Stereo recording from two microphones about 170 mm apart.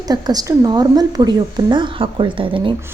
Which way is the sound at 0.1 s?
20° right (ahead or behind).